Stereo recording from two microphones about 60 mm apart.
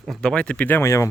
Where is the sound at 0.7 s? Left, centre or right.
Left.